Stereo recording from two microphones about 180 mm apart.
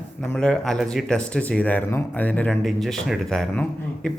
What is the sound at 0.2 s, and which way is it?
Speech, 5° left (ahead or behind).